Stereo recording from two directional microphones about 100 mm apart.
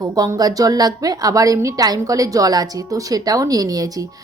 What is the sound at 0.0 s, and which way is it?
A woman's voice, 35° right (ahead or behind).